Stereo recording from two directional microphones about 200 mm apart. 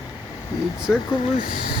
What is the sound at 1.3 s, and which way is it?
Speech, 45° left (ahead or behind).